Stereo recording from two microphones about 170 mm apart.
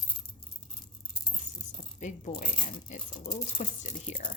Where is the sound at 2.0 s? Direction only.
50° left (ahead or behind).